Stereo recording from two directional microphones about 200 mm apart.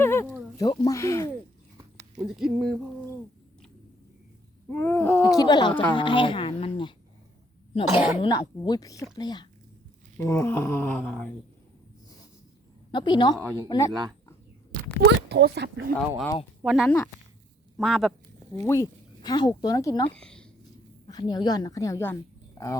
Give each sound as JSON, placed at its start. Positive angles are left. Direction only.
{"t": 0.0, "sound": "a sound", "side_deg": 10}
{"t": 0.5, "sound": "speech", "side_deg": 20}
{"t": 2.1, "sound": "speech", "side_deg": 0}
{"t": 4.7, "sound": "speech", "side_deg": 10}
{"t": 7.9, "sound": "speech", "side_deg": -10}
{"t": 8.2, "sound": "speech", "side_deg": 20}
{"t": 12.9, "sound": "speech", "side_deg": 25}
{"t": 15.3, "sound": "speech", "side_deg": -55}
{"t": 16.0, "sound": "speech", "side_deg": 5}
{"t": 18.6, "sound": "speech", "side_deg": 15}
{"t": 20.1, "sound": "speech", "side_deg": 5}
{"t": 21.1, "sound": "a woman's voice", "side_deg": 20}